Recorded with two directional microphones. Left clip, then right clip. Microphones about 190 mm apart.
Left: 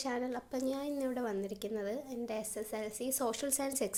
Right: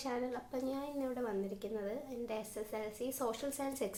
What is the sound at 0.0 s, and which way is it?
A woman's voice, 35° left (ahead or behind).